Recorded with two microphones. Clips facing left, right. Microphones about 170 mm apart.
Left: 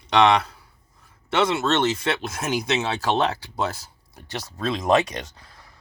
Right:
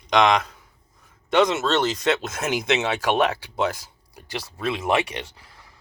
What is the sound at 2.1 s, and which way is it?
Speech, 20° right (ahead or behind).